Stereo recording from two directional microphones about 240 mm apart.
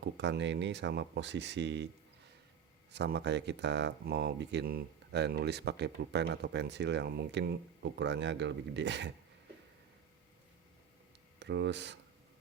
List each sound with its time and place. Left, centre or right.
0.0 s speech: right
2.9 s speech: right
11.3 s speech: right